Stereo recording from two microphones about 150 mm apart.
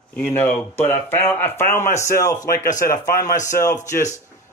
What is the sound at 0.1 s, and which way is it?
Speech, 10° left (ahead or behind).